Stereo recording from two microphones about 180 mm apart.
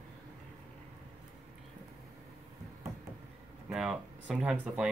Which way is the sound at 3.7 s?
5° right (ahead or behind).